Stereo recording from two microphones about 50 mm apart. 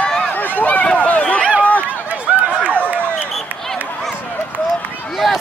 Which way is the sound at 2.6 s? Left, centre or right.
Left.